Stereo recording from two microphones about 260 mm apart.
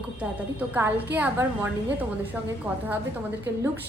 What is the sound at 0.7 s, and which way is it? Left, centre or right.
Speech, centre.